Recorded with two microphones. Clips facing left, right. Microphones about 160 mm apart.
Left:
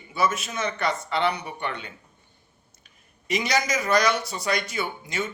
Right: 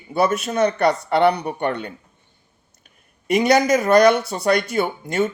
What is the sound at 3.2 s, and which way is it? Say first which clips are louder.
Speech: right 9 dB; 55° right (ahead or behind).